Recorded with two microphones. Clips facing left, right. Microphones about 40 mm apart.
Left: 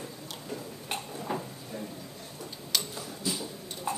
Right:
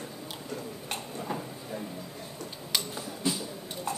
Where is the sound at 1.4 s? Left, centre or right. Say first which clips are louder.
Right 1 dB; centre.